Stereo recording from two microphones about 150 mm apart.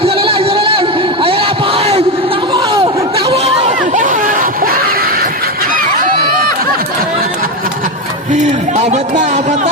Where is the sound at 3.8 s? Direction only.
60° right (ahead or behind); by 5.5 s 85° right.